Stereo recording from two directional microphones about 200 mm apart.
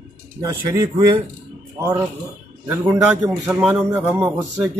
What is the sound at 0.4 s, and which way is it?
A man's voice, 15° right (ahead or behind).